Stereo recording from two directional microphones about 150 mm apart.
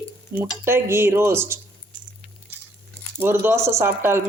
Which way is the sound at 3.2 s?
15° right (ahead or behind).